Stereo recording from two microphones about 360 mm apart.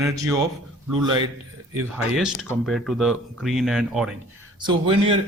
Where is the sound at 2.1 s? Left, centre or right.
Centre.